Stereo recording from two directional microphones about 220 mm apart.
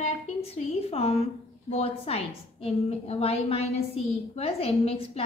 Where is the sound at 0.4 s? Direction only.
25° left (ahead or behind).